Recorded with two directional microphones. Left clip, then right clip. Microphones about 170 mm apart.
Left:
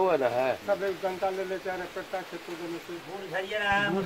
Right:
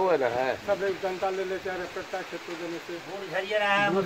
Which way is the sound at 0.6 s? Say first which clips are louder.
Right 1 dB; 5° left (ahead or behind).